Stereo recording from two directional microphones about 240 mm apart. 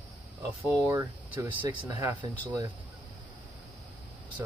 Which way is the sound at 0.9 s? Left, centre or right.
Centre.